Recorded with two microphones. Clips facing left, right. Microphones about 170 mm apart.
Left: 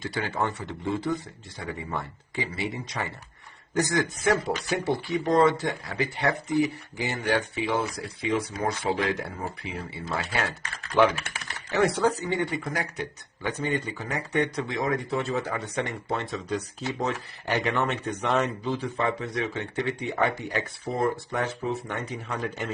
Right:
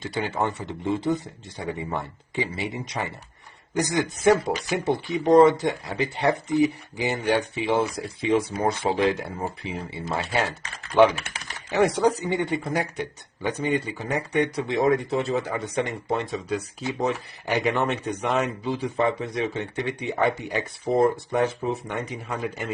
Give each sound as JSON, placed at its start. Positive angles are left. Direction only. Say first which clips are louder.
{"t": 0.0, "sound": "speech", "louder": "right 2 dB", "side_deg": -20}
{"t": 10.9, "sound": "speech", "louder": "right 4 dB", "side_deg": -15}
{"t": 14.7, "sound": "speech", "louder": "right 6 dB", "side_deg": -25}